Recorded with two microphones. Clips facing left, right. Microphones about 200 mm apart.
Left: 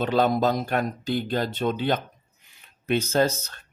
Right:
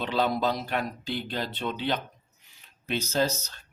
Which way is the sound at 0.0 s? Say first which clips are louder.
Left 5 dB; 45° left (ahead or behind).